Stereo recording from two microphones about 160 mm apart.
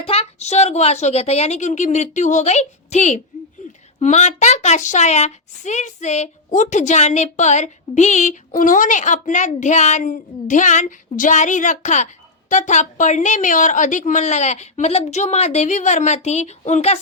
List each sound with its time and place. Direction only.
0.0 s a woman's voice: 40° left (ahead or behind)